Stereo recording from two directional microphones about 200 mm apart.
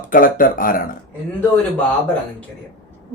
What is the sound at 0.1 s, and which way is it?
Speech, 45° left (ahead or behind).